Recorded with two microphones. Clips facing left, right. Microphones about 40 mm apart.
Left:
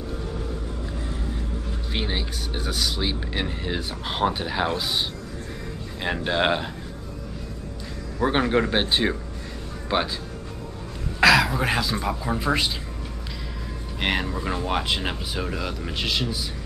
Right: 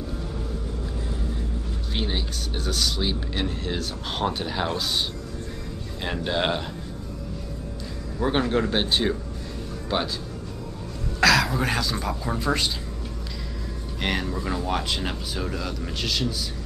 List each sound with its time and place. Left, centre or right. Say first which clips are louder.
2.0 s speech: even; centre
6.0 s speech: left 3 dB; centre
8.2 s speech: left 2 dB; centre
11.1 s speech: left 2 dB; centre
13.9 s speech: left 2 dB; centre